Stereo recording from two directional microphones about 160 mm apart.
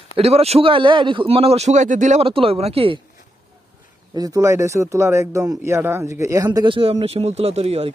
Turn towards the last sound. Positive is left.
turn(degrees=-40)  # may be behind; listen again after turning